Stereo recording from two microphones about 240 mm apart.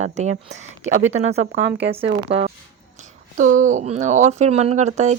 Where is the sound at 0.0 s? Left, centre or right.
Right.